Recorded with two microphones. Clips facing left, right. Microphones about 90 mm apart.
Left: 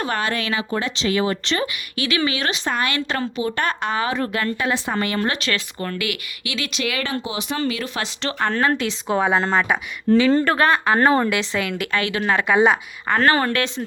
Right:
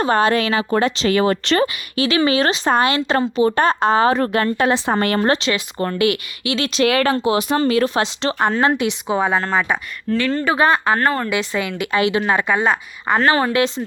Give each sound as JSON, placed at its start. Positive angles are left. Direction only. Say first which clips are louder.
{"t": 0.0, "sound": "speech", "louder": "right 7 dB", "side_deg": -30}
{"t": 0.5, "sound": "speech", "louder": "right 6 dB", "side_deg": -45}
{"t": 1.6, "sound": "speech", "louder": "right 6 dB", "side_deg": -30}
{"t": 5.4, "sound": "speech", "louder": "right 3 dB", "side_deg": -20}
{"t": 5.8, "sound": "speech", "louder": "right 8 dB", "side_deg": -30}
{"t": 6.8, "sound": "speech", "louder": "right 11 dB", "side_deg": -50}
{"t": 8.0, "sound": "speech", "louder": "right 5 dB", "side_deg": -25}
{"t": 9.0, "sound": "speech", "louder": "left 1 dB", "side_deg": 0}
{"t": 10.9, "sound": "speech", "louder": "left 2 dB", "side_deg": 10}
{"t": 11.3, "sound": "speech", "louder": "right 1 dB", "side_deg": -5}
{"t": 11.9, "sound": "speech", "louder": "right 5 dB", "side_deg": -20}
{"t": 12.2, "sound": "speech", "louder": "left 1 dB", "side_deg": -10}